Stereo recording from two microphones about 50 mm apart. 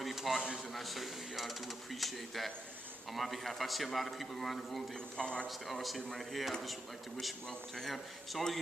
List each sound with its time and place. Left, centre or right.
0.0 s a sound: centre
0.7 s speech: centre
5.1 s speech: centre
5.5 s speech: centre
7.8 s speech: centre